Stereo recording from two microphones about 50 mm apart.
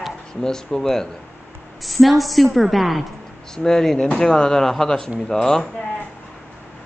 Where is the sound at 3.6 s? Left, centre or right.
Centre.